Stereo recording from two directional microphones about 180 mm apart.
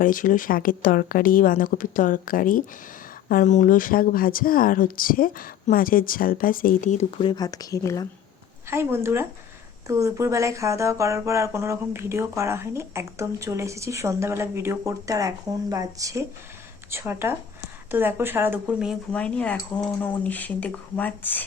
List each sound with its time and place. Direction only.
0.0 s speech: 50° left (ahead or behind)
7.2 s speech: 25° left (ahead or behind)
8.7 s speech: 15° right (ahead or behind)
19.1 s speech: 5° left (ahead or behind)